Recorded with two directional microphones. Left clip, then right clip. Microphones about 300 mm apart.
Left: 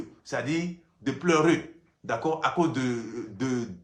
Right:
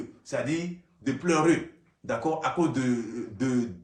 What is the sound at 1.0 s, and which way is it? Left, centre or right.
Speech, centre.